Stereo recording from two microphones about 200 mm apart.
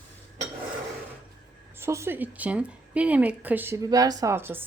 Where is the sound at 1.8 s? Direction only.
15° right (ahead or behind).